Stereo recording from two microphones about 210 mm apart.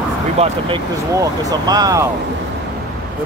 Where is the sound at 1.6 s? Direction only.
20° right (ahead or behind).